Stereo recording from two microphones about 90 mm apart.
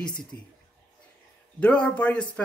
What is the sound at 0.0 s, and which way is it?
Speech, 10° left (ahead or behind).